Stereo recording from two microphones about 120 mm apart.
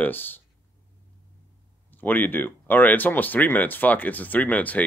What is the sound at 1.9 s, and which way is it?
Speech, 15° left (ahead or behind).